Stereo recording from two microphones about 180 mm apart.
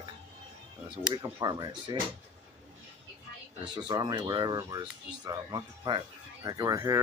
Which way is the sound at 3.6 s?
25° right (ahead or behind).